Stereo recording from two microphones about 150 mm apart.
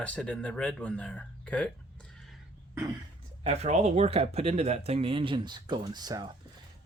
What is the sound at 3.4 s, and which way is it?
Speech, 45° right (ahead or behind).